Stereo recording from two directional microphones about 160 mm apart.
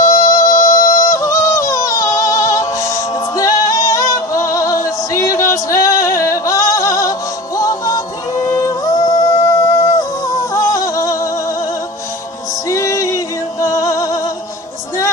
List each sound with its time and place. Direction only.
0.0 s yodeling: 20° left (ahead or behind)
12.6 s music: 20° left (ahead or behind)